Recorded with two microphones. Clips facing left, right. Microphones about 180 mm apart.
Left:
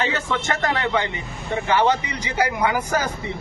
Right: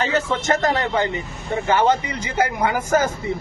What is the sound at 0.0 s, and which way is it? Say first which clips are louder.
Speech: right 3 dB; 40° right (ahead or behind).